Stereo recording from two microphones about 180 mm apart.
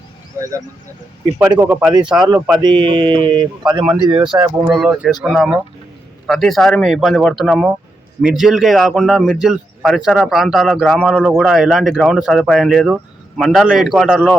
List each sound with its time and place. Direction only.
1.4 s speech: 10° right (ahead or behind)
2.1 s a man's voice: 25° right (ahead or behind)
4.7 s a man's voice: centre (ahead or behind)